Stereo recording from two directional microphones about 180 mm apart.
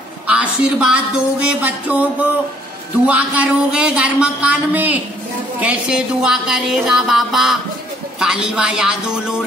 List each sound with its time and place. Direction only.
0.3 s a woman's voice: 5° right (ahead or behind)
5.6 s music: 5° right (ahead or behind)
8.2 s a man's voice: 5° right (ahead or behind)